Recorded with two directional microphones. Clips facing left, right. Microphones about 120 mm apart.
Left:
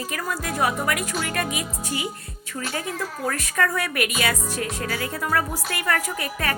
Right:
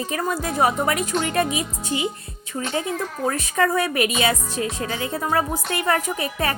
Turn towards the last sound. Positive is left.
turn(degrees=-25)  # may be behind; listen again after turning